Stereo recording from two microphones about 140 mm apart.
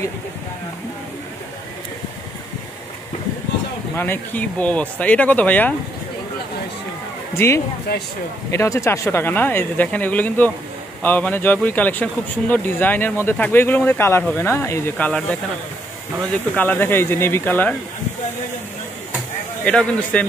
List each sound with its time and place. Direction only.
3.9 s speech: 15° left (ahead or behind)
7.3 s speech: 20° left (ahead or behind)
16.5 s speech: 15° left (ahead or behind)
19.6 s speech: 5° left (ahead or behind)